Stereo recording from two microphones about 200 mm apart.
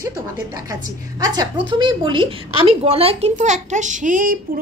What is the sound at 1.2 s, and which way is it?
A woman's voice, 20° right (ahead or behind).